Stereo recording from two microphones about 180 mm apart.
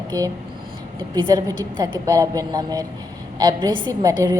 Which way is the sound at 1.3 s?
20° right (ahead or behind).